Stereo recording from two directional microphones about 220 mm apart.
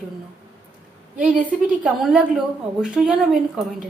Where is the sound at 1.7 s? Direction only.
5° right (ahead or behind).